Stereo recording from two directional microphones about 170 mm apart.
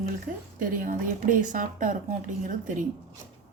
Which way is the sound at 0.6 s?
50° right (ahead or behind).